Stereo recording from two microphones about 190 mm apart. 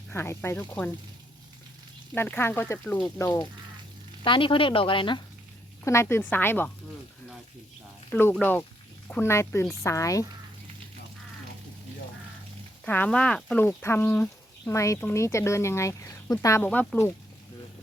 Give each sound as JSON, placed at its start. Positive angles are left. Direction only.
{"t": 0.1, "sound": "speech", "side_deg": 15}
{"t": 2.1, "sound": "speech", "side_deg": 10}
{"t": 5.8, "sound": "speech", "side_deg": 15}
{"t": 8.1, "sound": "speech", "side_deg": 10}
{"t": 12.8, "sound": "speech", "side_deg": 10}